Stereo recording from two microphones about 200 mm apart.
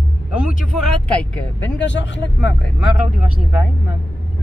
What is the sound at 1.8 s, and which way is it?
Speech, 65° left (ahead or behind).